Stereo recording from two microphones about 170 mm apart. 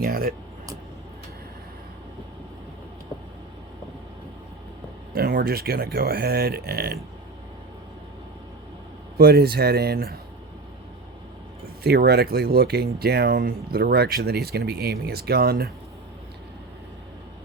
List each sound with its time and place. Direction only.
0.0 s speech: 60° right (ahead or behind)
5.1 s speech: 65° right (ahead or behind)
9.1 s speech: 65° right (ahead or behind)
11.8 s speech: 70° right (ahead or behind)